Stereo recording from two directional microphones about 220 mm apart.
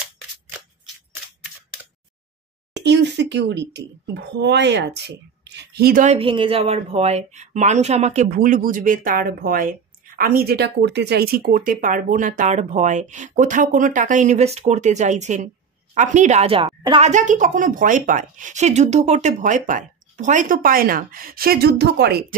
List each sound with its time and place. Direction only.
2.8 s speech: 50° right (ahead or behind)
6.1 s speech: 25° right (ahead or behind); by 22.2 s 50° right (ahead or behind)